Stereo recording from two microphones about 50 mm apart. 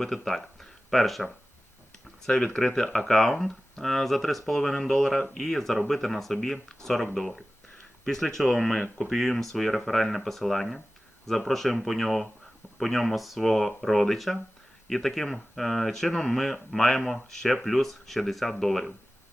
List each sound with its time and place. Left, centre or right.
0.0 s speech: centre